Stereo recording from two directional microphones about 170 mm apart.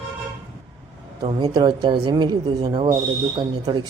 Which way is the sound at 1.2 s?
25° right (ahead or behind).